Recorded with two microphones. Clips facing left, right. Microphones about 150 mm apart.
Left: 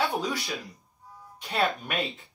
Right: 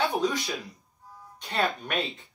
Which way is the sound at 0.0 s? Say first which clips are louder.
Right 2 dB; centre (ahead or behind).